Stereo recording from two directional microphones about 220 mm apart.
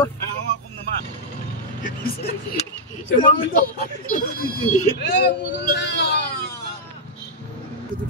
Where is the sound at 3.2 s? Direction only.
40° left (ahead or behind).